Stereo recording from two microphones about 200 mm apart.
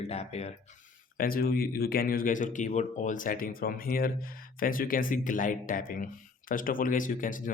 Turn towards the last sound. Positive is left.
turn(degrees=40)  # may be behind; listen again after turning